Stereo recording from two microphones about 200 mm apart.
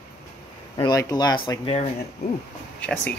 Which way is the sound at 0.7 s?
20° left (ahead or behind).